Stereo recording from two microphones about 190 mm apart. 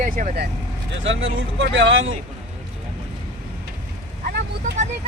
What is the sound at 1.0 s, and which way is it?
Speech, 80° right.